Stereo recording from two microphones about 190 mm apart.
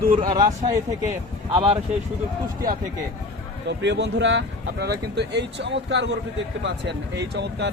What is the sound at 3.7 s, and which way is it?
Speech, 65° right (ahead or behind).